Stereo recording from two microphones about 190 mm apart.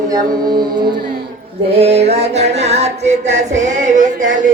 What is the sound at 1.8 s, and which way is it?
Music, 35° right (ahead or behind).